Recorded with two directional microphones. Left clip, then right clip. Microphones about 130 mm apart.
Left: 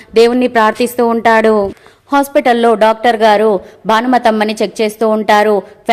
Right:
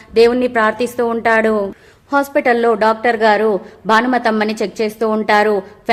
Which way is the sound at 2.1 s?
35° left (ahead or behind).